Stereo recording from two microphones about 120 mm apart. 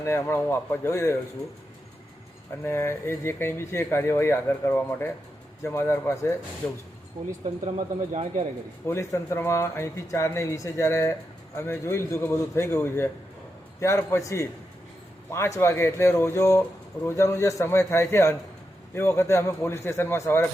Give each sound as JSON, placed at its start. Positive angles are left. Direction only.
{"t": 0.0, "sound": "speech", "side_deg": 25}
{"t": 2.6, "sound": "speech", "side_deg": 20}
{"t": 8.1, "sound": "speech", "side_deg": -60}
{"t": 8.9, "sound": "speech", "side_deg": 25}